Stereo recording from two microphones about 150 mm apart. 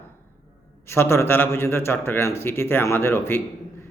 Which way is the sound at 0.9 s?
15° left (ahead or behind).